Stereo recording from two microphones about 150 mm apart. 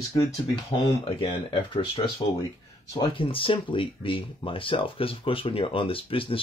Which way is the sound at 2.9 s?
30° left (ahead or behind).